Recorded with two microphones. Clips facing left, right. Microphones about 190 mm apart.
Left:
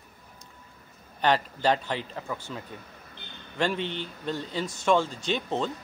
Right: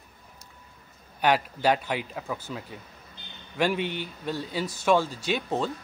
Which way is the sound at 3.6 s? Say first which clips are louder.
Right 2 dB; 10° right (ahead or behind).